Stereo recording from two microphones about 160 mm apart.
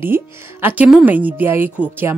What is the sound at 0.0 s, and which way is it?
Speech, 15° right (ahead or behind).